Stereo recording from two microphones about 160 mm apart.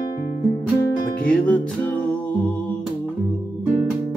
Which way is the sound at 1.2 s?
10° left (ahead or behind).